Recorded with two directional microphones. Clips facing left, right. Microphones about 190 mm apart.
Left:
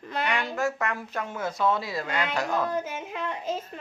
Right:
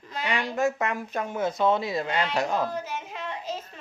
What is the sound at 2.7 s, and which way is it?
Speech, 50° left (ahead or behind).